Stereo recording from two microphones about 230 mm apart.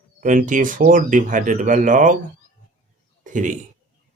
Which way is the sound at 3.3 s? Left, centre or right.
Right.